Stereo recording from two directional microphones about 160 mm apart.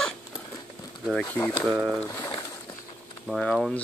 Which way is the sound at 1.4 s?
15° left (ahead or behind).